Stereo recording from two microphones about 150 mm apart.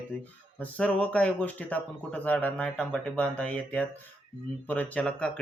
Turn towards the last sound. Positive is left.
turn(degrees=10)  # may be behind; listen again after turning